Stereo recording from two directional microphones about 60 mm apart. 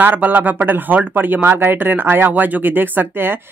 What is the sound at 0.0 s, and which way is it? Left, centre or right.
Speech, right.